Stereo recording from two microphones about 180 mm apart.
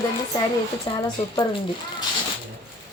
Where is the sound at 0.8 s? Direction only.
25° left (ahead or behind).